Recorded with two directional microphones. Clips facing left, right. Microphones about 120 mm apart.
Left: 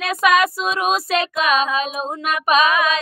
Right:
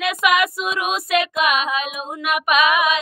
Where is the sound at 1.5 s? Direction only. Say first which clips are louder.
Left 3 dB; 30° left (ahead or behind).